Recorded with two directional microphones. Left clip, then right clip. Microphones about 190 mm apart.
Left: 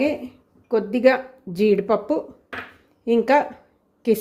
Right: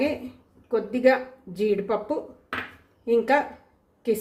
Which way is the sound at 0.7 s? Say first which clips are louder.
Left 3 dB; 45° left (ahead or behind).